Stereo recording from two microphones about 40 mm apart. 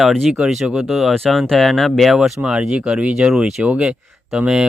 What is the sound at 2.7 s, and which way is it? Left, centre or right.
Speech, right.